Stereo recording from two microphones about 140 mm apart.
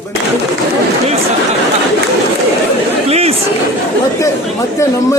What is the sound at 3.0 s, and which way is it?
Chatter, 45° right (ahead or behind).